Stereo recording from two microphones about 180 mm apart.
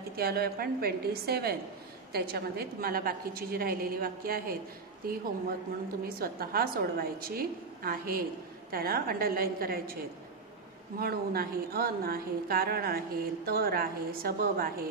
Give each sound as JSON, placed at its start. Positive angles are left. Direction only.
{"t": 0.1, "sound": "speech", "side_deg": -60}
{"t": 6.0, "sound": "speech", "side_deg": -55}
{"t": 11.0, "sound": "speech", "side_deg": -55}